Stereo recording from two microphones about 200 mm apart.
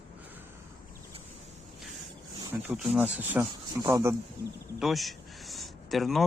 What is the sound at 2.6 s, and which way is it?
Speech, 5° right (ahead or behind).